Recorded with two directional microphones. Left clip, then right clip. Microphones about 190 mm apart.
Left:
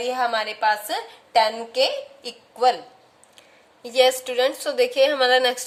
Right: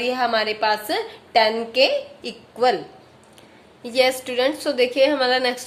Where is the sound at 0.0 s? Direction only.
30° left (ahead or behind).